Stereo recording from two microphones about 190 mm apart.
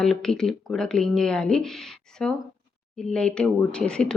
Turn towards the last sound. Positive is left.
turn(degrees=5)  # may be behind; listen again after turning